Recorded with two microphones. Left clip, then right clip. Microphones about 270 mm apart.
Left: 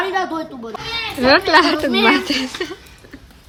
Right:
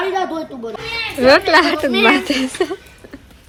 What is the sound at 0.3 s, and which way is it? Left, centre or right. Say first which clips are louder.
A woman's voice: right 1 dB; centre.